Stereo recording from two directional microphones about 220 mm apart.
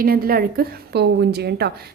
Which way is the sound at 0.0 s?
40° right (ahead or behind).